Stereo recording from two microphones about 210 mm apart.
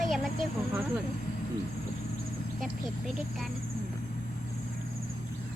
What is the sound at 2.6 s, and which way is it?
Speech, centre (ahead or behind).